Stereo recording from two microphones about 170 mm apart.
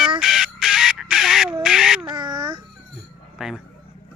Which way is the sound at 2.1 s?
25° right (ahead or behind).